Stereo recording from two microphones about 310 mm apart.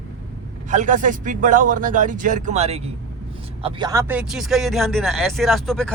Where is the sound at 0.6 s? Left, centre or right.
Right.